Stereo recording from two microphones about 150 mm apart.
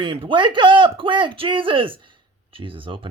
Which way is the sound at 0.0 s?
35° right (ahead or behind).